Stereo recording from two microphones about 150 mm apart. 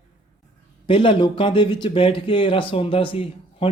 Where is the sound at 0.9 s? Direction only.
35° left (ahead or behind).